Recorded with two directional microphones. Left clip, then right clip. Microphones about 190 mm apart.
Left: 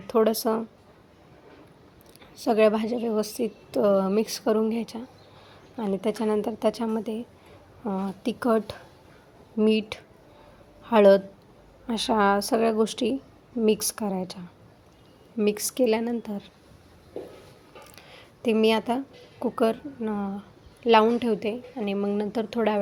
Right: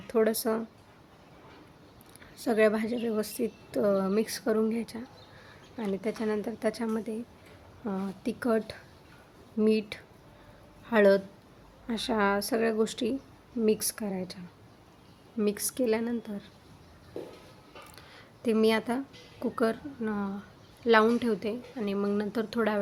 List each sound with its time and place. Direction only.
0.1 s a woman's voice: 15° left (ahead or behind)
2.4 s a woman's voice: 10° left (ahead or behind)
5.8 s a woman's voice: 25° left (ahead or behind)
15.4 s a woman's voice: 15° left (ahead or behind)
17.9 s a woman's voice: 10° left (ahead or behind)